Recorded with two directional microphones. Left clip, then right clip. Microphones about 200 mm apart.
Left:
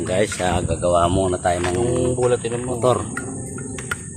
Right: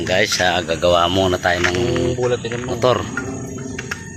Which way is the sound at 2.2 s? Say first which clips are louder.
Left 1 dB; 20° left (ahead or behind).